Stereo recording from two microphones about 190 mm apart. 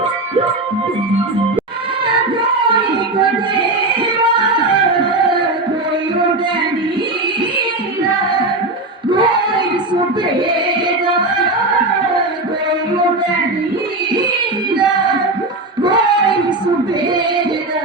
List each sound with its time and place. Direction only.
9.1 s child singing: 25° right (ahead or behind)